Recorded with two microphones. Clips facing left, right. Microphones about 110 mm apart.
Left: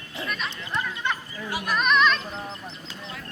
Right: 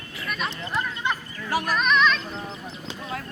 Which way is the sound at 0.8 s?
15° right (ahead or behind).